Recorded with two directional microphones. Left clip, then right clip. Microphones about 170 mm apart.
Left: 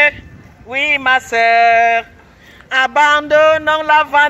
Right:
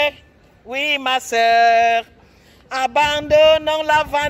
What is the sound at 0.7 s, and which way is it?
Speech, 35° right (ahead or behind).